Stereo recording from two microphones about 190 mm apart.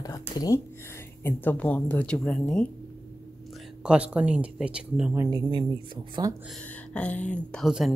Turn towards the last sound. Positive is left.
turn(degrees=0)  # may be behind; listen again after turning